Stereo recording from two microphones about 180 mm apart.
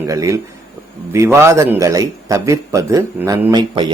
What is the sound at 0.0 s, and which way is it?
A man's voice, 15° right (ahead or behind).